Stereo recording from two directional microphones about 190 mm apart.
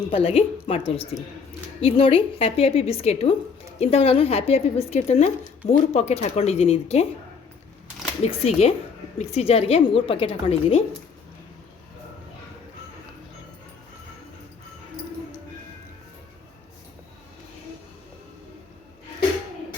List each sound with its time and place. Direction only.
0.1 s a woman's voice: 30° left (ahead or behind)
8.2 s speech: 35° left (ahead or behind)